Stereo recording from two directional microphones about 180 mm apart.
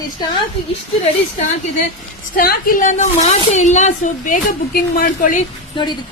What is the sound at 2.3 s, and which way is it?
A woman's voice, 55° left (ahead or behind).